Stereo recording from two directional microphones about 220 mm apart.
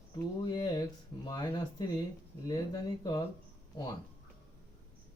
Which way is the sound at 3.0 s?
15° left (ahead or behind).